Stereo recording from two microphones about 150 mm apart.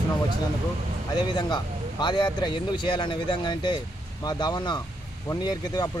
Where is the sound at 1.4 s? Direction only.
30° left (ahead or behind).